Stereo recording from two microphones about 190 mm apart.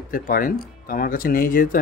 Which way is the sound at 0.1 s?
50° left (ahead or behind).